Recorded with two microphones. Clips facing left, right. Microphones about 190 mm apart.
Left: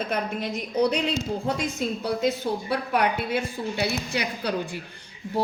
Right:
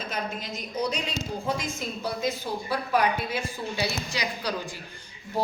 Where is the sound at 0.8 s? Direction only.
65° left (ahead or behind).